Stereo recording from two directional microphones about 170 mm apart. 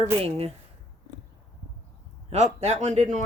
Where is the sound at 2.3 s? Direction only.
40° right (ahead or behind).